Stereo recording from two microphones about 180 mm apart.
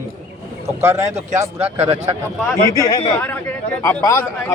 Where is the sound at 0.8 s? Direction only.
15° right (ahead or behind).